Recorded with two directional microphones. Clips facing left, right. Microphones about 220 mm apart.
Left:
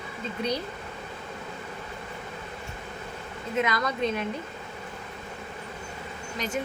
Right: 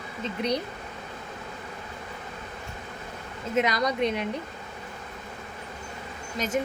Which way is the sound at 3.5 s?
20° right (ahead or behind).